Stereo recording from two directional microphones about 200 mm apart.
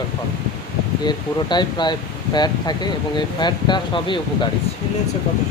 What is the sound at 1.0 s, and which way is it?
Speech, 20° left (ahead or behind).